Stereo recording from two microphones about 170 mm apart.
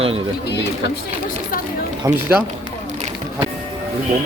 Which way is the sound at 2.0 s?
10° right (ahead or behind).